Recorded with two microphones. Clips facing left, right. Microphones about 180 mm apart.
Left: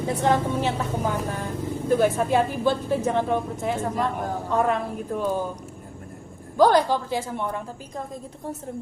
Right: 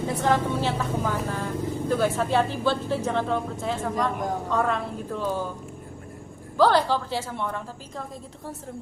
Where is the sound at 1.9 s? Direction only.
15° left (ahead or behind).